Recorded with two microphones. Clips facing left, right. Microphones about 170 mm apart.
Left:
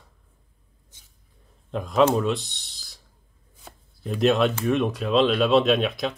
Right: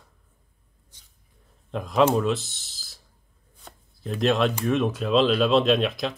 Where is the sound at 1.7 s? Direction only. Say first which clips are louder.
Left 1 dB; centre (ahead or behind).